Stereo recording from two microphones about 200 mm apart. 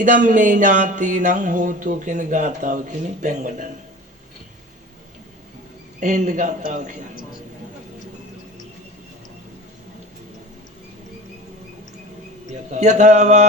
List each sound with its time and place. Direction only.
0.0 s speech: 40° right (ahead or behind)
6.0 s speech: 40° right (ahead or behind)
12.5 s speech: 35° right (ahead or behind)